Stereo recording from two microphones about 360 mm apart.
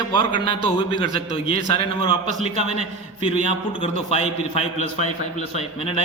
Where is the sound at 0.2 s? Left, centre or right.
Centre.